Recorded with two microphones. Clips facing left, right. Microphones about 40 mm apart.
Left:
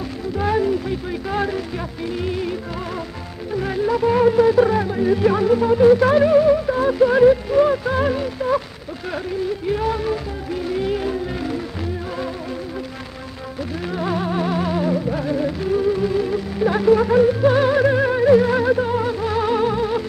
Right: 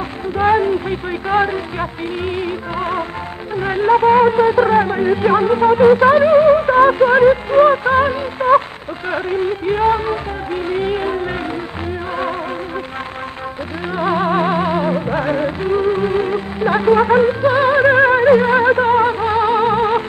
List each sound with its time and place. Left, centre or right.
0.4 s speech: right
8.4 s speech: right
9.1 s music: right
13.9 s music: right
16.5 s speech: right
17.4 s music: right